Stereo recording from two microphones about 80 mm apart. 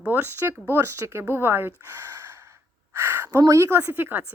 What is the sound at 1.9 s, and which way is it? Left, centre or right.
Gasp, right.